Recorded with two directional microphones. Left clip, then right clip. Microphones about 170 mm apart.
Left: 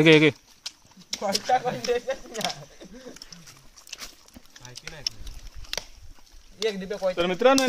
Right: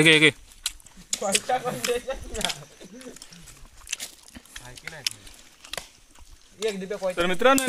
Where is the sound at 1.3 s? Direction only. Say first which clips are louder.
Left 3 dB; centre (ahead or behind).